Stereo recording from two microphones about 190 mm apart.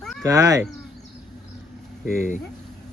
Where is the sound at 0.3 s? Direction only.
15° right (ahead or behind).